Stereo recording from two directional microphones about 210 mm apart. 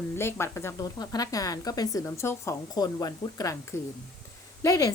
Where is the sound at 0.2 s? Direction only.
10° left (ahead or behind).